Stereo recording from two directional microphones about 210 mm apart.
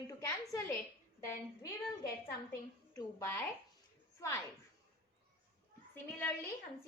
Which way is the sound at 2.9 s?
10° left (ahead or behind).